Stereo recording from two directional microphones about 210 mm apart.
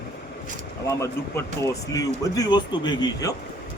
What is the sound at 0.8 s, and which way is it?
Speech, 15° left (ahead or behind).